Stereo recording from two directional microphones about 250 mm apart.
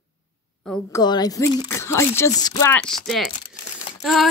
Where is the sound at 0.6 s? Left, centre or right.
Centre.